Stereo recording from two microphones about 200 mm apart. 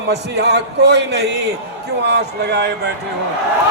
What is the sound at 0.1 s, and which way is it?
A man's voice, 55° right (ahead or behind).